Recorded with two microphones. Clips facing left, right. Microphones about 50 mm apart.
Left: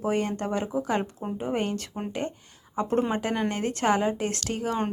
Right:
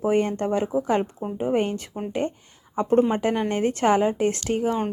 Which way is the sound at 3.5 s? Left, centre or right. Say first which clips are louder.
Right 5 dB; right.